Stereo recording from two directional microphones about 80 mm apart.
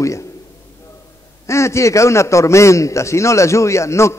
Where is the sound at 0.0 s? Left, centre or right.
Left.